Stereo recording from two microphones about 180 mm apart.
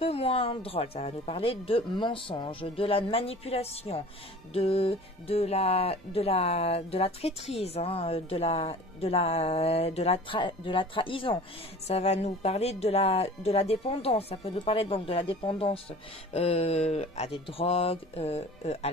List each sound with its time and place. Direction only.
0.0 s speech: 30° left (ahead or behind)